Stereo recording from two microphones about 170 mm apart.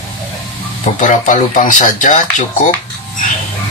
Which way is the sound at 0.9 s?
45° left (ahead or behind).